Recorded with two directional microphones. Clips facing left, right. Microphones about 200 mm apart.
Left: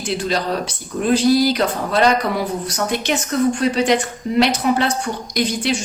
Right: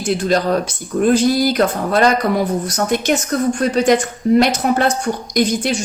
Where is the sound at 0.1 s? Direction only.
50° right (ahead or behind).